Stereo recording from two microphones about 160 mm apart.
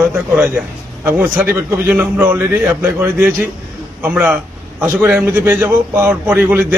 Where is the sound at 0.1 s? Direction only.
10° right (ahead or behind).